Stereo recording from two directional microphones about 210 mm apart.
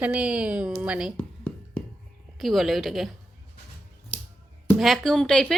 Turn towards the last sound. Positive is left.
turn(degrees=5)  # may be behind; listen again after turning